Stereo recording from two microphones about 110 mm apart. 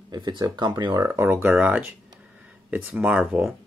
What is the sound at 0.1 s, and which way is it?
Speech, 40° right (ahead or behind).